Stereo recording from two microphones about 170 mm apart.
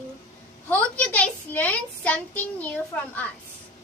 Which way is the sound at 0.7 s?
10° left (ahead or behind).